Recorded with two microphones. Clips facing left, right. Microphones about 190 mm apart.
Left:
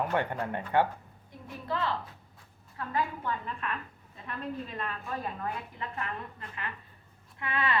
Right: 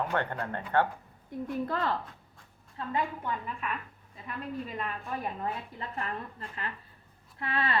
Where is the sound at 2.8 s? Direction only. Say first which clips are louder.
Right 2 dB; 25° right (ahead or behind).